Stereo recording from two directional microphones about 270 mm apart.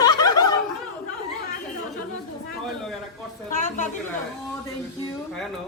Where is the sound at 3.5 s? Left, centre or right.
Left.